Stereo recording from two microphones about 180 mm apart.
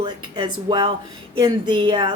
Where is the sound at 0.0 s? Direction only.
25° right (ahead or behind).